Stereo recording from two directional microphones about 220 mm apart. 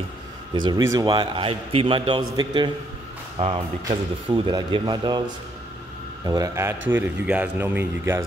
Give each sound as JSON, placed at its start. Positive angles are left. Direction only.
{"t": 0.6, "sound": "a man's voice", "side_deg": -15}